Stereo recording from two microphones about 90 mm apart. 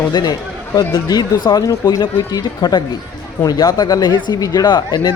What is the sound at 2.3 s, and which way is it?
Speech, 45° left (ahead or behind).